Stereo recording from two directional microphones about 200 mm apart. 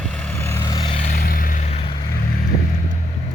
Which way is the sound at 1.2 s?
45° left (ahead or behind).